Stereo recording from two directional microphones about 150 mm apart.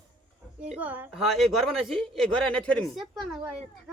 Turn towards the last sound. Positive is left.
turn(degrees=0)  # may be behind; listen again after turning